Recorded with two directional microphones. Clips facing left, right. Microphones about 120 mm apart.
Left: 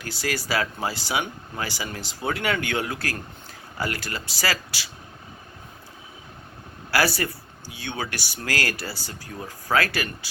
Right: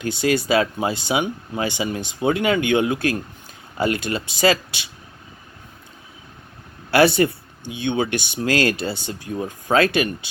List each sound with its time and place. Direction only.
0.0 s speech: 20° right (ahead or behind)
6.9 s speech: 25° right (ahead or behind)